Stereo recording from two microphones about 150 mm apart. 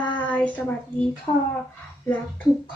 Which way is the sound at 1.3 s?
40° left (ahead or behind).